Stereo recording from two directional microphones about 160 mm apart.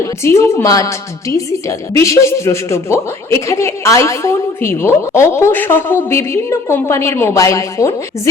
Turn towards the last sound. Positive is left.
turn(degrees=20)  # may be behind; listen again after turning